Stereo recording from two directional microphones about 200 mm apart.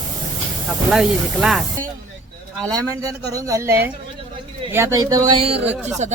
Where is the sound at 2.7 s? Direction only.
15° right (ahead or behind).